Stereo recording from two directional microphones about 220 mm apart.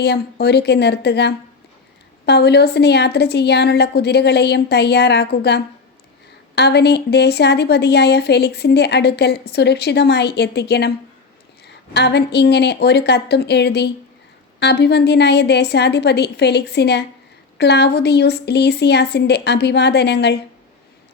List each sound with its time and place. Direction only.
0.0 s a woman's voice: 50° left (ahead or behind)